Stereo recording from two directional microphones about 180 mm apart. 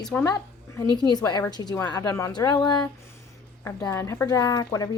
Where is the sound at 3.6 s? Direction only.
15° left (ahead or behind).